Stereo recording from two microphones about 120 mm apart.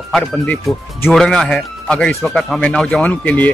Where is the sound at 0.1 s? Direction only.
5° left (ahead or behind).